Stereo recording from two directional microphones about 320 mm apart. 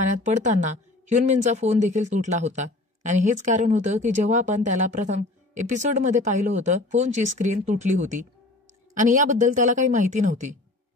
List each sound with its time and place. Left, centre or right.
0.0 s speech: right